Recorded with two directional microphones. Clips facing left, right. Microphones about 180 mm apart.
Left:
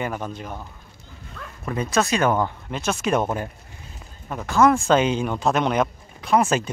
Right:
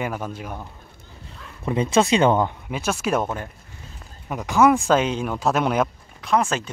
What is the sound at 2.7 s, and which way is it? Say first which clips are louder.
Speech: left 2 dB; 5° right (ahead or behind).